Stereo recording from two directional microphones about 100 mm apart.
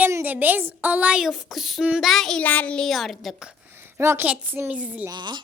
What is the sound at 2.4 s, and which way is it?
Speech, 15° left (ahead or behind).